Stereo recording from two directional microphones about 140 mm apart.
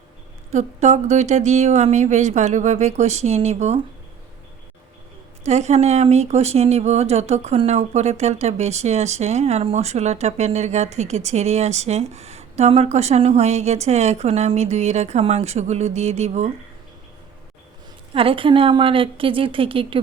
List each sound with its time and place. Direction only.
0.5 s speech: 55° right (ahead or behind)
5.5 s speech: 50° right (ahead or behind)
18.1 s a woman's voice: 40° right (ahead or behind)